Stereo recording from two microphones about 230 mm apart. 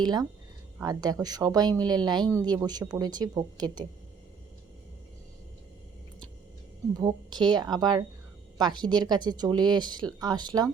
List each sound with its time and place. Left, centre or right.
0.0 s speech: centre
7.0 s speech: centre